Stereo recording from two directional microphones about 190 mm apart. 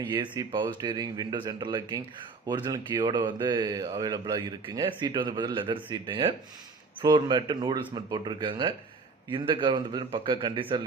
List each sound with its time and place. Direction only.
0.0 s speech: 20° right (ahead or behind)